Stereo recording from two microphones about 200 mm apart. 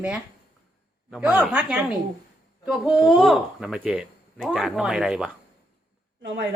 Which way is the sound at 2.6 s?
Centre (ahead or behind).